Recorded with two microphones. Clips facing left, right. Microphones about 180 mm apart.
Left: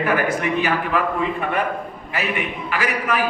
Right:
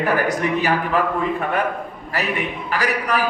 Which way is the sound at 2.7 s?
40° right (ahead or behind).